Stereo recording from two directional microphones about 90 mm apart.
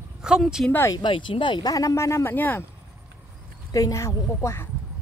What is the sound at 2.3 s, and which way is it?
Speech, 20° left (ahead or behind).